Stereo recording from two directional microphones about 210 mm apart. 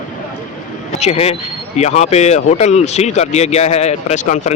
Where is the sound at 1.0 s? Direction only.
30° left (ahead or behind).